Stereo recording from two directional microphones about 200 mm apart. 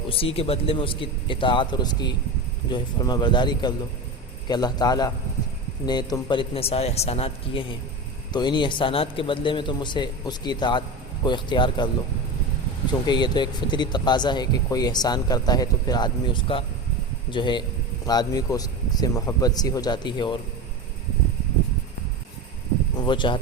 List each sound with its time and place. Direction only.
0.1 s speech: 30° left (ahead or behind)
12.9 s speech: 20° left (ahead or behind)
23.0 s speech: 25° left (ahead or behind)